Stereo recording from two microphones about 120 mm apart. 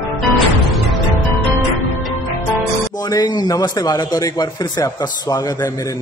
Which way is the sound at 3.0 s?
35° left (ahead or behind).